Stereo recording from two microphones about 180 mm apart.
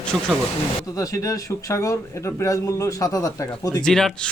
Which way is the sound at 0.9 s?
20° left (ahead or behind).